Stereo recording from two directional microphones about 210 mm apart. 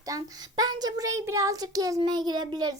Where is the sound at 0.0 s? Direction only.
15° right (ahead or behind).